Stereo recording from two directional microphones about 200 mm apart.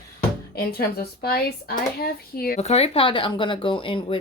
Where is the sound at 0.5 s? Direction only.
50° left (ahead or behind).